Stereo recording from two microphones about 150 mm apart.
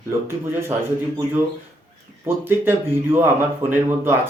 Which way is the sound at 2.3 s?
15° right (ahead or behind).